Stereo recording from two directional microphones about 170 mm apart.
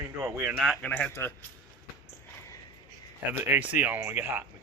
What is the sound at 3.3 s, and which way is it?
Speech, 10° right (ahead or behind).